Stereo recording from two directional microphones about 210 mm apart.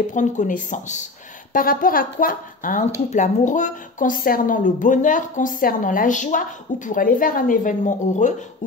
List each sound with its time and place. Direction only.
0.1 s a woman's voice: 35° left (ahead or behind)